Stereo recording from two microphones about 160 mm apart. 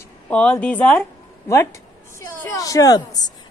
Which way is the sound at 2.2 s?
20° left (ahead or behind).